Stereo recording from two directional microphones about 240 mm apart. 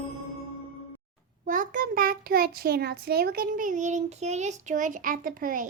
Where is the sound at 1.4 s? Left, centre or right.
Right.